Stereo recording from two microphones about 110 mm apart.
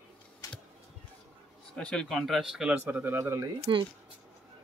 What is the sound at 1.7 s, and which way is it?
Speech, 10° left (ahead or behind).